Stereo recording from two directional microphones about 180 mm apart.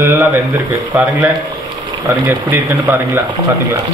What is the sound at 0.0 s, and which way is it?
Speech, 10° right (ahead or behind).